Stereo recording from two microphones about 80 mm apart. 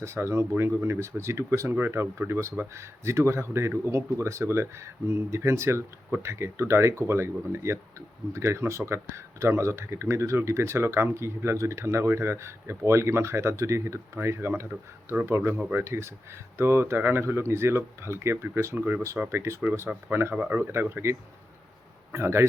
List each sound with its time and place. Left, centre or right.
0.0 s speech: right
19.9 s speech: right